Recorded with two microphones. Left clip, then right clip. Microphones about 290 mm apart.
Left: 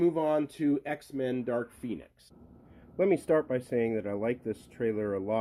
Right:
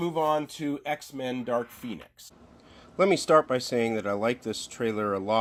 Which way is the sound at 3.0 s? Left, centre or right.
Centre.